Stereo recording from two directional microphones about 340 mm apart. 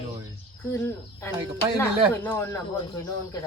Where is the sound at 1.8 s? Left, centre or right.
Centre.